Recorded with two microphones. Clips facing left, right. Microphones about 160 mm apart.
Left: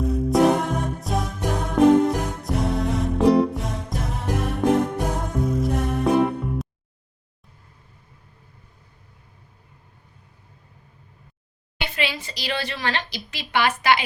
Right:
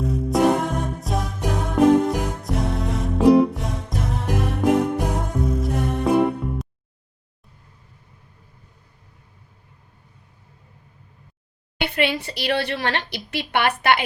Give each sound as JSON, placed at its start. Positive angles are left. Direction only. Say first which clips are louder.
{"t": 0.0, "sound": "music", "louder": "left 1 dB", "side_deg": 0}
{"t": 11.8, "sound": "a woman's voice", "louder": "right 6 dB", "side_deg": -60}